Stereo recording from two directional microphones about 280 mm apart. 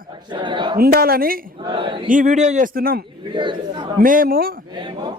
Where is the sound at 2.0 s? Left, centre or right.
Right.